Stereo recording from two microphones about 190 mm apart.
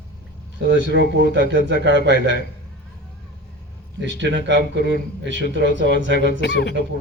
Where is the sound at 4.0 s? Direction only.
65° right (ahead or behind).